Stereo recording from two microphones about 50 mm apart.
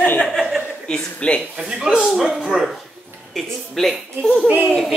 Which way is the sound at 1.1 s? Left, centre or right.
Left.